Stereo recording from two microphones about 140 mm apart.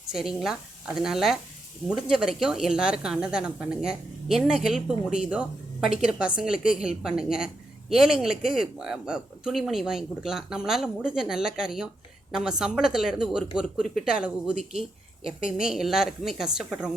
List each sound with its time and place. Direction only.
0.1 s a woman's voice: 5° right (ahead or behind)